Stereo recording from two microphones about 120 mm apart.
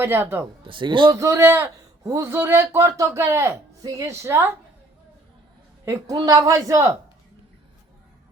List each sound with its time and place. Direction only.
0.0 s speech: 20° right (ahead or behind)
0.6 s a man's voice: 45° right (ahead or behind)
1.1 s speech: 25° right (ahead or behind)
5.8 s speech: 20° right (ahead or behind)
6.1 s speech: 30° right (ahead or behind)